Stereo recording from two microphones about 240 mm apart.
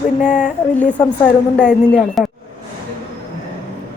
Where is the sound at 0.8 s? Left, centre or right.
Centre.